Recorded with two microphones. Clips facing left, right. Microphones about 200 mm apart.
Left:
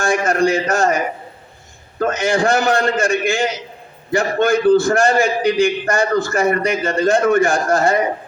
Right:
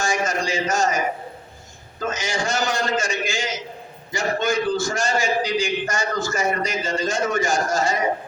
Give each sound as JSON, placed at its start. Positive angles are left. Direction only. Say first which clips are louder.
{"t": 0.0, "sound": "a man's voice", "louder": "left 8 dB", "side_deg": 60}